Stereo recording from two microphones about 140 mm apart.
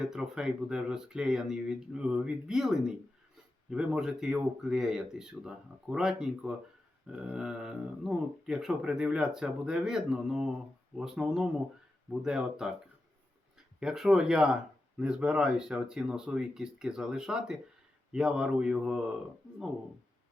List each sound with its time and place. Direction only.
0.0 s speech: 5° right (ahead or behind)
13.7 s speech: 5° right (ahead or behind)